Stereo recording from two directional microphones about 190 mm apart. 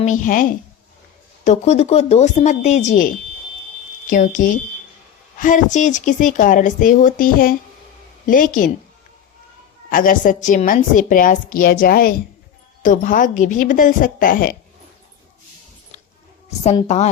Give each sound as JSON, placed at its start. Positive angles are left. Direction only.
{"t": 0.0, "sound": "a woman's voice", "side_deg": 40}
{"t": 9.9, "sound": "a woman's voice", "side_deg": 45}
{"t": 16.8, "sound": "speech", "side_deg": 35}